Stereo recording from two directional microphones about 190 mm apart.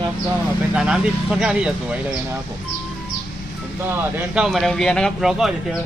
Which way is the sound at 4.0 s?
10° right (ahead or behind).